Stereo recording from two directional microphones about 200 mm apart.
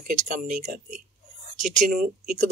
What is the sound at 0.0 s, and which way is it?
Speech, 40° right (ahead or behind).